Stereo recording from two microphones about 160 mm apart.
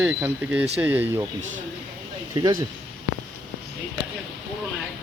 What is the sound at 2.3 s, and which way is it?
Speech, 25° right (ahead or behind).